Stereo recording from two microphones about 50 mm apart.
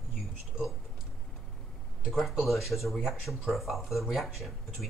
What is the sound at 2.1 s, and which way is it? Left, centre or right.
Speech, centre.